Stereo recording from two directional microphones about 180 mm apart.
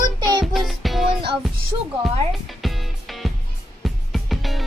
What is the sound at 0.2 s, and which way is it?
Music, 20° right (ahead or behind).